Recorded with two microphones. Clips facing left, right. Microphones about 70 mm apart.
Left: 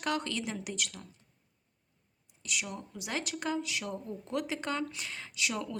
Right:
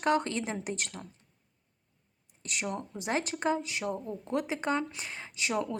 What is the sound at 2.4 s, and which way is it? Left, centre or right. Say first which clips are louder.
Speech: right 3 dB; right.